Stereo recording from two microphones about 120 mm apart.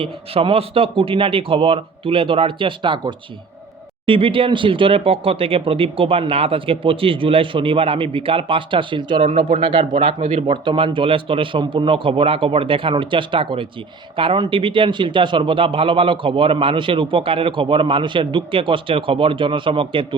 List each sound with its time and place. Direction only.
0.0 s a man's voice: 50° right (ahead or behind)
10.0 s speech: 60° right (ahead or behind)
10.4 s a man's voice: 40° right (ahead or behind)